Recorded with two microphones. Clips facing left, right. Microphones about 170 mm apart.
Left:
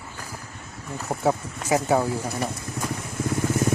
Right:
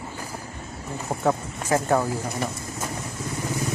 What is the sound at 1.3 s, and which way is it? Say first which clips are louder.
Speech: even; 10° left (ahead or behind).